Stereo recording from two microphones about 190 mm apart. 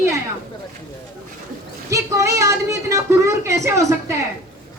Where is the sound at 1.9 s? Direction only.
15° right (ahead or behind).